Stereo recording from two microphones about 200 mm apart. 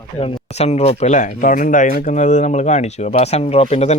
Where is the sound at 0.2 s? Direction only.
30° left (ahead or behind).